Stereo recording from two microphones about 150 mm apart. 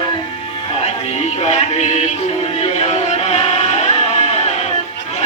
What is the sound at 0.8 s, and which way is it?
Music, 45° left (ahead or behind).